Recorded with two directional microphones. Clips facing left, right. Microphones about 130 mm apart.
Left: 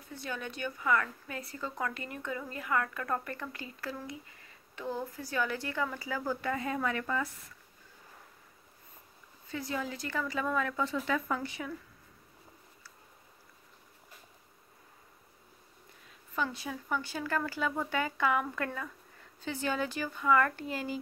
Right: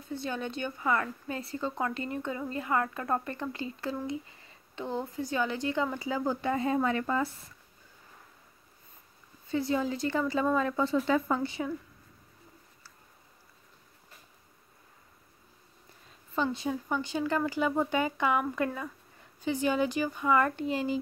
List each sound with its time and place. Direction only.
0.0 s speech: 25° right (ahead or behind)
9.5 s speech: 25° right (ahead or behind)
16.3 s speech: 25° right (ahead or behind)